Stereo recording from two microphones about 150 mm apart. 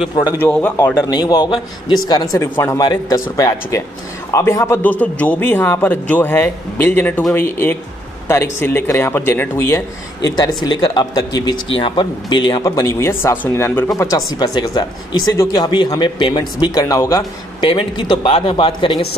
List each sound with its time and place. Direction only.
0.1 s speech: 30° left (ahead or behind)
0.4 s a man's voice: 10° left (ahead or behind)
1.1 s speech: 30° left (ahead or behind)
4.8 s a man's voice: 10° left (ahead or behind); by 19.0 s 35° left (ahead or behind)